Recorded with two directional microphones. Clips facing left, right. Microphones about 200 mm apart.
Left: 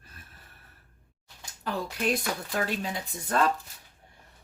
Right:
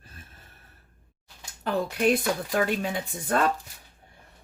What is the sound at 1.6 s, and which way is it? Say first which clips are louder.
Speech: right 6 dB; 55° right (ahead or behind).